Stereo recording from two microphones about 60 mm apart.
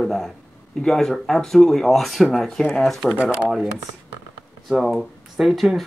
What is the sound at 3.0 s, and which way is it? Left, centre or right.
Speech, centre.